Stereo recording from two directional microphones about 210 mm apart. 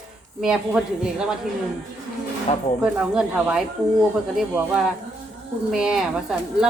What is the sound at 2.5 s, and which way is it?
Speech, 30° left (ahead or behind).